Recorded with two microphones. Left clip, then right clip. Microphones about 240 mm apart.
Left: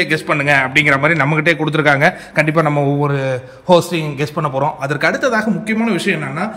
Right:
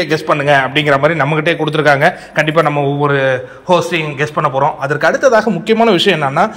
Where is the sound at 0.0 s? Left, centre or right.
Centre.